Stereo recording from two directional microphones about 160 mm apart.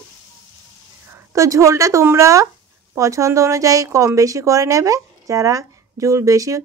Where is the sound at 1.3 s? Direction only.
20° right (ahead or behind).